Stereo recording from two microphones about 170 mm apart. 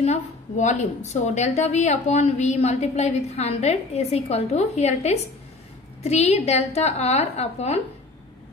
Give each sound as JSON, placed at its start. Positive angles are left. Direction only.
{"t": 0.7, "sound": "a woman's voice", "side_deg": 45}